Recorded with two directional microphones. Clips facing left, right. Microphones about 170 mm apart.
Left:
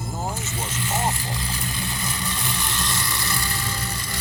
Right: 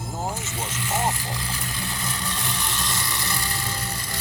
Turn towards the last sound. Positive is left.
turn(degrees=-25)  # may be behind; listen again after turning